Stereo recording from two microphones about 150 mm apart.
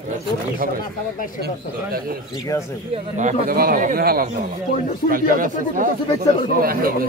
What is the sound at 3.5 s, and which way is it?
Speech, 75° right (ahead or behind).